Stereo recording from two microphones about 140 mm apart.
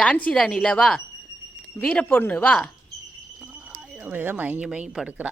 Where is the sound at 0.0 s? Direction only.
10° left (ahead or behind).